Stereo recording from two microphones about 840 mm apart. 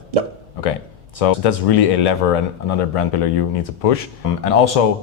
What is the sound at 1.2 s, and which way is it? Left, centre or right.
Speech, left.